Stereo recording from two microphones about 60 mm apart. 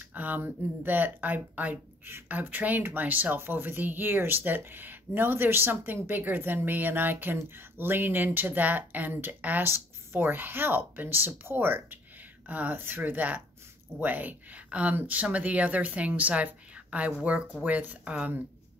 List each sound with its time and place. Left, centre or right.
0.1 s speech: right